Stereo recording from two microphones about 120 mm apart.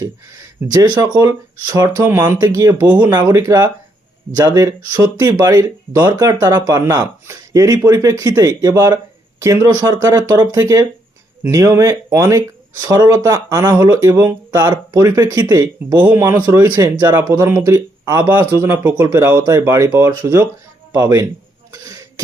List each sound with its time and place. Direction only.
0.7 s speech: 30° right (ahead or behind)
2.8 s speech: 15° right (ahead or behind)
3.1 s speech: 30° right (ahead or behind)
14.1 s speech: 15° right (ahead or behind)
14.5 s speech: 25° right (ahead or behind)
16.0 s speech: 20° right (ahead or behind)
21.7 s cough: 30° right (ahead or behind)